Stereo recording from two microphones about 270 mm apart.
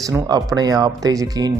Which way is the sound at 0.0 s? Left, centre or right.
Centre.